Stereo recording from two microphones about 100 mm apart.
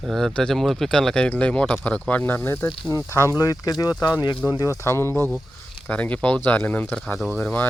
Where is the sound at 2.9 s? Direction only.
30° left (ahead or behind); by 7.6 s 15° left (ahead or behind).